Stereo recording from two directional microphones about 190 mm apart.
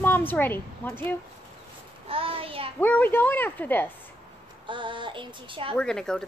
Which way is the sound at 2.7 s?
10° left (ahead or behind).